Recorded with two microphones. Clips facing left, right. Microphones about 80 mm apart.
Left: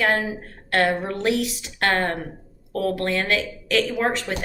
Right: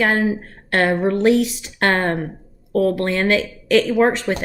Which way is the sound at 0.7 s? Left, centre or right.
Right.